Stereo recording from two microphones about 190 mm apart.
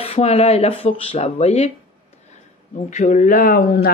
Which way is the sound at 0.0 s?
35° left (ahead or behind).